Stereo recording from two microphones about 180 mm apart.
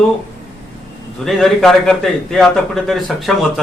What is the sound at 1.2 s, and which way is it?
A man's voice, centre (ahead or behind).